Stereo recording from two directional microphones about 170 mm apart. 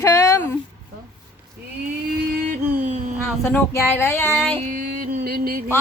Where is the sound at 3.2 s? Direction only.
10° left (ahead or behind).